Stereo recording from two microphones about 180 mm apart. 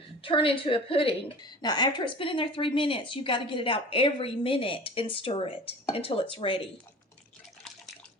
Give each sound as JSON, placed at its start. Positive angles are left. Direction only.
{"t": 0.2, "sound": "a woman's voice", "side_deg": 30}